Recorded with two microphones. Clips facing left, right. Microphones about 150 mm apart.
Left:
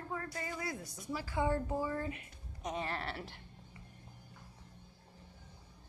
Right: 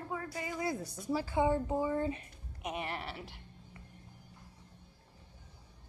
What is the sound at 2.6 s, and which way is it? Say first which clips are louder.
Speech: even; 10° right (ahead or behind).